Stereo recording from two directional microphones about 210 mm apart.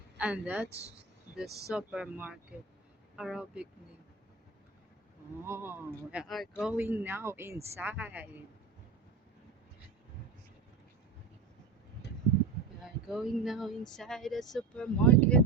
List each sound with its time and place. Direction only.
0.2 s speech: 5° right (ahead or behind)
1.5 s speech: 50° right (ahead or behind)
1.7 s speech: 5° right (ahead or behind)
5.4 s speech: 10° right (ahead or behind)
12.8 s speech: centre (ahead or behind)